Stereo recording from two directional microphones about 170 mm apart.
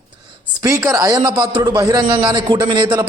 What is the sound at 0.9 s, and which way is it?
A man's voice, 20° right (ahead or behind).